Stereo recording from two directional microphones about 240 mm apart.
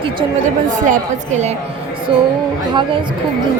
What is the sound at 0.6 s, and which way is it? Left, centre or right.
A woman's voice, right.